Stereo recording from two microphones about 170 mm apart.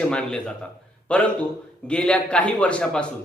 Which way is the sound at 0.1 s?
5° left (ahead or behind).